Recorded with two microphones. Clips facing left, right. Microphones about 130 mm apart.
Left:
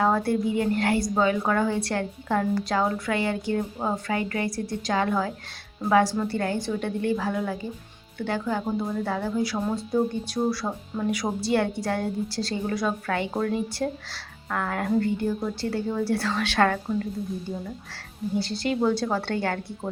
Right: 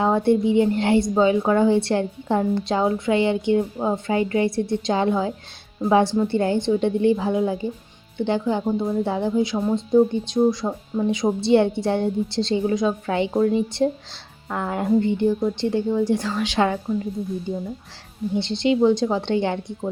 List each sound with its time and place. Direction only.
0.0 s a woman's voice: 25° right (ahead or behind)
18.3 s a woman's voice: 25° right (ahead or behind)